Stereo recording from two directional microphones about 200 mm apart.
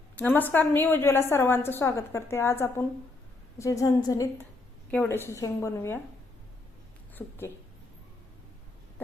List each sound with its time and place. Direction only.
0.2 s a woman's voice: 10° left (ahead or behind)
7.2 s a woman's voice: 10° left (ahead or behind)